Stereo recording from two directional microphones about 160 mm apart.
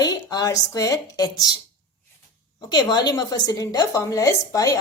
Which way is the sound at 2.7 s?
25° left (ahead or behind).